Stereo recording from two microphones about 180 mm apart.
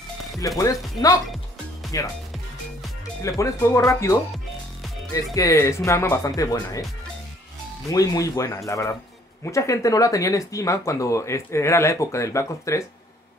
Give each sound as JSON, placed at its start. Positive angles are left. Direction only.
{"t": 0.4, "sound": "speech", "side_deg": 20}
{"t": 1.9, "sound": "speech", "side_deg": 20}
{"t": 3.2, "sound": "speech", "side_deg": 15}
{"t": 7.9, "sound": "speech", "side_deg": 20}